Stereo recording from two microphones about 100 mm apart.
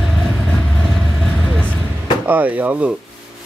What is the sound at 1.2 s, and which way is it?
Vehicle, 5° left (ahead or behind).